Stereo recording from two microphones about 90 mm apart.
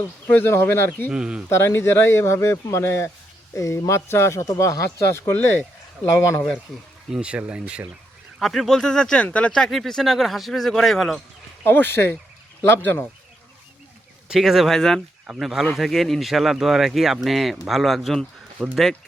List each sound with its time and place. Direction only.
0.3 s speech: 15° left (ahead or behind)
1.1 s speech: 10° right (ahead or behind)
1.5 s speech: 30° left (ahead or behind)
7.1 s speech: 15° right (ahead or behind)
8.4 s speech: centre (ahead or behind)
9.6 s speech: 5° left (ahead or behind)
11.6 s speech: 25° left (ahead or behind)
14.3 s speech: 5° right (ahead or behind)